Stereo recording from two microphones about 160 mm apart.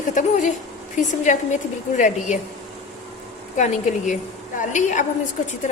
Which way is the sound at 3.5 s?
50° left (ahead or behind).